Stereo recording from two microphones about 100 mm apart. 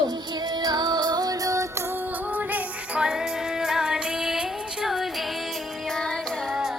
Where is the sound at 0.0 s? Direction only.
45° right (ahead or behind); by 6.7 s centre (ahead or behind).